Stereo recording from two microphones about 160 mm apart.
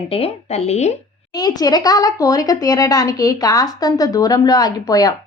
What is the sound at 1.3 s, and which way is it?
Speech, 25° left (ahead or behind).